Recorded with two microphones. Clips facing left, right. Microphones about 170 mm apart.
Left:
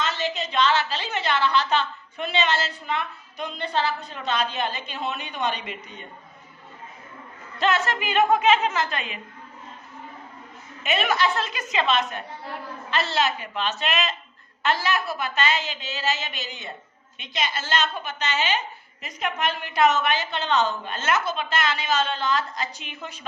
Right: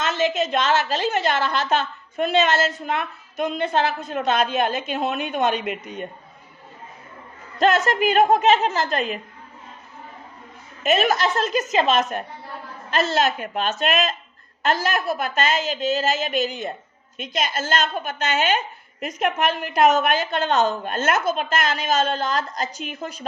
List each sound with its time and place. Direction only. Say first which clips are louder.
0.0 s a woman's voice: right 6 dB; 50° right (ahead or behind)
7.6 s a woman's voice: right 6 dB; 45° right (ahead or behind)
10.8 s a woman's voice: right 4 dB; 40° right (ahead or behind)